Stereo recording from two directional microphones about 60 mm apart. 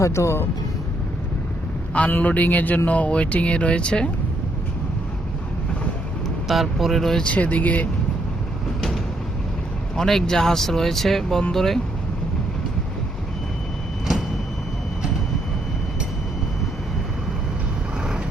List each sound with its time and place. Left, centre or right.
0.0 s speech: left
1.9 s speech: left
6.5 s speech: centre
7.2 s speech: left
9.9 s speech: centre